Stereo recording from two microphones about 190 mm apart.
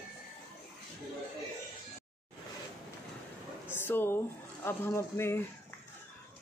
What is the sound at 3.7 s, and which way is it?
Speech, 10° left (ahead or behind).